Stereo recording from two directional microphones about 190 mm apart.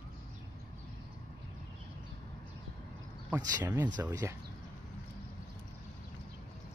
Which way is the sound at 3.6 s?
10° right (ahead or behind).